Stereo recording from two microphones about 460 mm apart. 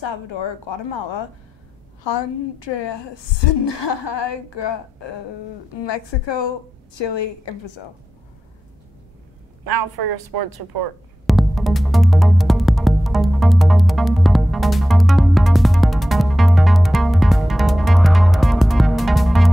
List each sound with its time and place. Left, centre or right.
0.0 s a woman's voice: left
9.7 s a woman's voice: right
11.2 s music: centre